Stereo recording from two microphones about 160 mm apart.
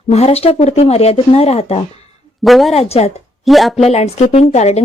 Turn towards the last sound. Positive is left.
turn(degrees=45)  # may be behind; listen again after turning